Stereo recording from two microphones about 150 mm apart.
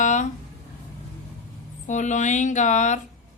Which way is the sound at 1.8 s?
55° left (ahead or behind).